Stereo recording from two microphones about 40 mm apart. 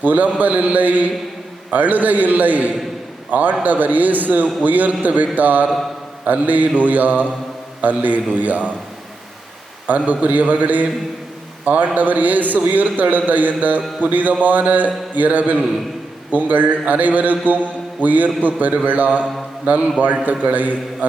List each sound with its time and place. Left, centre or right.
0.0 s a man's voice: right
9.8 s a man's voice: right